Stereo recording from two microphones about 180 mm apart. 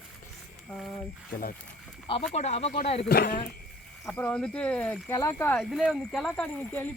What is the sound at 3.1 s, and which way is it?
Speech, 55° left (ahead or behind).